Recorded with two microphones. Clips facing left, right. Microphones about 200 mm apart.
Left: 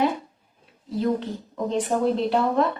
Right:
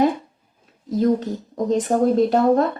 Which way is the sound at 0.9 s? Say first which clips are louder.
Right 5 dB; 40° right (ahead or behind).